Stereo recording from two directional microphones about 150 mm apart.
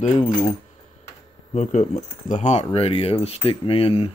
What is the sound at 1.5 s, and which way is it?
Speech, 55° left (ahead or behind).